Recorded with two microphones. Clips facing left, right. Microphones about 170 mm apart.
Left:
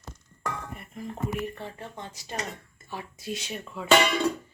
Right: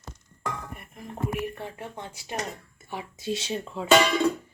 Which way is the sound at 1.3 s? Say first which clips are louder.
Right 1 dB; 15° right (ahead or behind).